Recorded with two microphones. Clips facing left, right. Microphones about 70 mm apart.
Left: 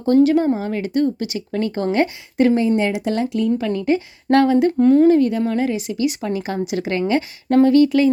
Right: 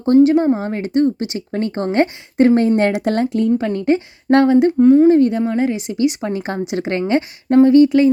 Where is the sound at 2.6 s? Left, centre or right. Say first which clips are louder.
Right 3 dB; right.